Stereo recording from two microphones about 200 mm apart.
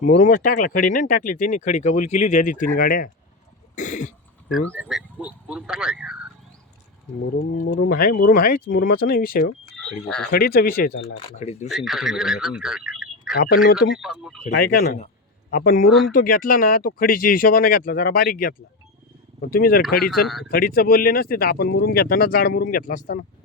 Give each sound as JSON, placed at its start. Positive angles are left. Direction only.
{"t": 0.2, "sound": "speech", "side_deg": 40}
{"t": 3.8, "sound": "throat clearing", "side_deg": 40}
{"t": 4.7, "sound": "speech", "side_deg": 0}
{"t": 7.3, "sound": "speech", "side_deg": 70}
{"t": 7.9, "sound": "speech", "side_deg": 45}
{"t": 11.0, "sound": "speech", "side_deg": 35}
{"t": 11.7, "sound": "speech", "side_deg": 0}
{"t": 13.3, "sound": "speech", "side_deg": 50}
{"t": 13.9, "sound": "speech", "side_deg": 0}
{"t": 14.5, "sound": "speech", "side_deg": 50}
{"t": 15.9, "sound": "speech", "side_deg": 0}
{"t": 16.1, "sound": "speech", "side_deg": 45}
{"t": 20.2, "sound": "speech", "side_deg": 0}
{"t": 20.5, "sound": "speech", "side_deg": 45}